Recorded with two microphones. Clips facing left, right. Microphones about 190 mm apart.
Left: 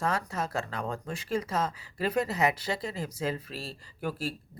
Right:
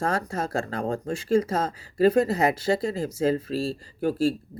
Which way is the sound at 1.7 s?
45° right (ahead or behind).